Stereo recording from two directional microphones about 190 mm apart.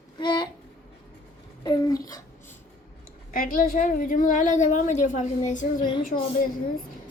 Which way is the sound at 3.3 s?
45° left (ahead or behind).